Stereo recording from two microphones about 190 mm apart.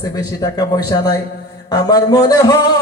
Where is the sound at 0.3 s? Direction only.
20° left (ahead or behind).